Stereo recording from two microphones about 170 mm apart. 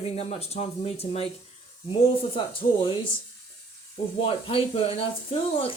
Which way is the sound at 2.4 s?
30° left (ahead or behind).